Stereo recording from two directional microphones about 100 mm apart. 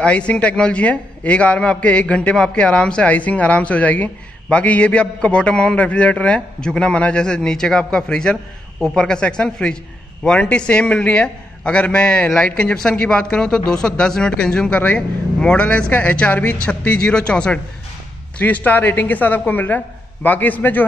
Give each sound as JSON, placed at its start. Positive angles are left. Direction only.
{"t": 0.0, "sound": "a man's voice", "side_deg": 10}